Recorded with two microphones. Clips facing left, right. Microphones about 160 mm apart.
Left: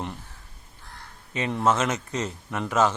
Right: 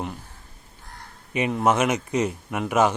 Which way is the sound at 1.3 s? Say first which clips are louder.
Right 2 dB; 15° right (ahead or behind).